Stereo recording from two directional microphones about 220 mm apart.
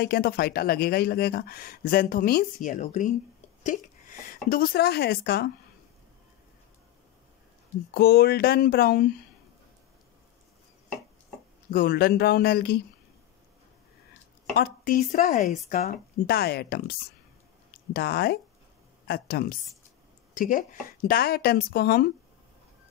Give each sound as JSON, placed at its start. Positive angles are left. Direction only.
{"t": 0.0, "sound": "speech", "side_deg": 45}
{"t": 7.9, "sound": "speech", "side_deg": 45}
{"t": 11.7, "sound": "speech", "side_deg": 40}
{"t": 14.6, "sound": "speech", "side_deg": 35}
{"t": 17.9, "sound": "speech", "side_deg": 45}